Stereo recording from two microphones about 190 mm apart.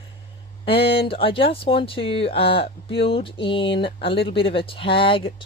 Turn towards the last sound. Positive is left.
turn(degrees=30)  # may be behind; listen again after turning